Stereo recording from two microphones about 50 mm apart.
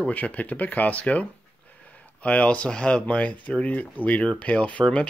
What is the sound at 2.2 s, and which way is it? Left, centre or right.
Speech, left.